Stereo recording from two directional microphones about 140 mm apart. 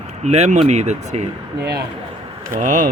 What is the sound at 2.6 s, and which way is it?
Speech, 65° right (ahead or behind).